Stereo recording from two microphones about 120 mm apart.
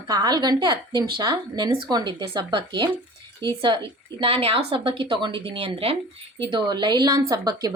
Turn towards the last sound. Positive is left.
turn(degrees=-35)  # may be behind; listen again after turning